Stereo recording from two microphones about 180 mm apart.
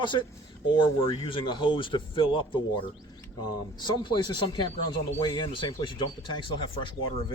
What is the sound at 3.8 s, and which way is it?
Speech, 25° left (ahead or behind).